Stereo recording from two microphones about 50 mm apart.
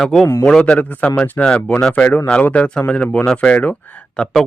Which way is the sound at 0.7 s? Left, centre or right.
Left.